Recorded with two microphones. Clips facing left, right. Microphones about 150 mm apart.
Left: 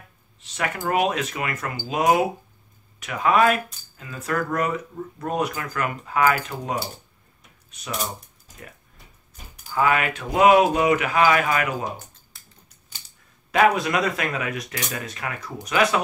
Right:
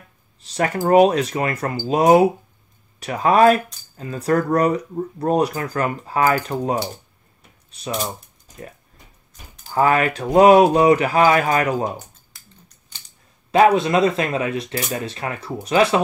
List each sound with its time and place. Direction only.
0.4 s speech: 35° right (ahead or behind)
9.8 s speech: 35° right (ahead or behind)
12.3 s typing: centre (ahead or behind)
13.5 s speech: 25° right (ahead or behind)